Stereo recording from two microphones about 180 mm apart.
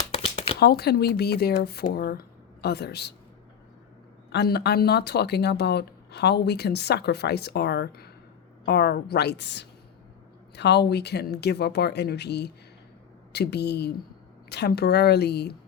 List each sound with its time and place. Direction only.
0.2 s a sound: 30° left (ahead or behind)
0.6 s speech: 60° left (ahead or behind)
4.3 s speech: 65° left (ahead or behind)